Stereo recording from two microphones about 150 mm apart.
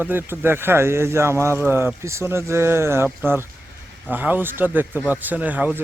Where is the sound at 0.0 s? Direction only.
15° right (ahead or behind).